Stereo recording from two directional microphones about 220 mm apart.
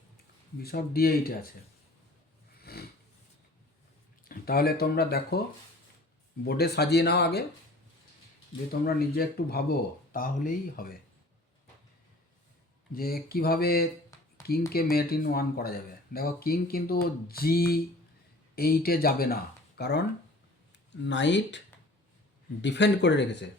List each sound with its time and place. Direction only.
0.6 s speech: 45° left (ahead or behind)
2.6 s a sound: 45° left (ahead or behind)
4.3 s speech: 45° left (ahead or behind)
6.4 s speech: 45° left (ahead or behind)
8.8 s speech: 45° left (ahead or behind)
12.9 s speech: 45° left (ahead or behind)
14.1 s a sound: 15° left (ahead or behind)
14.7 s speech: 45° left (ahead or behind)
22.6 s speech: 50° left (ahead or behind)